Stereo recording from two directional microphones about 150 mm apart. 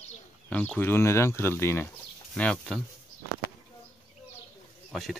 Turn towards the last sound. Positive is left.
turn(degrees=0)  # may be behind; listen again after turning